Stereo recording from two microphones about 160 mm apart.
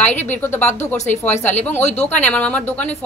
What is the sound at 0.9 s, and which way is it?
Speech, 50° left (ahead or behind).